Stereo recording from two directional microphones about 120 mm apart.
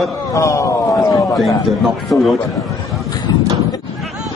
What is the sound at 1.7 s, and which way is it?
Speech, centre (ahead or behind).